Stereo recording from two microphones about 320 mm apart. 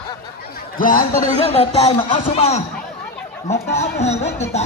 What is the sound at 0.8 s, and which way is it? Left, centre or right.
A man's voice, left.